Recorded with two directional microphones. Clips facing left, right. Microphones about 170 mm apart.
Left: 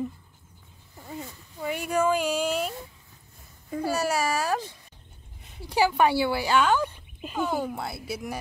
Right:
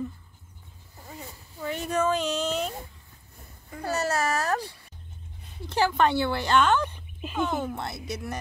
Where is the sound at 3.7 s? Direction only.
10° left (ahead or behind).